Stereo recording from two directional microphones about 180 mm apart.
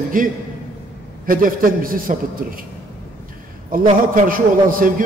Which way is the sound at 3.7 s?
50° right (ahead or behind).